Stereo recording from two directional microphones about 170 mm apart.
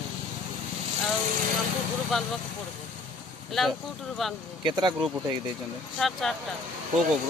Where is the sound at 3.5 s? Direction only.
Centre (ahead or behind).